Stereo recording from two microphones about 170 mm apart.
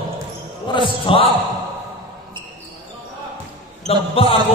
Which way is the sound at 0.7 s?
30° left (ahead or behind).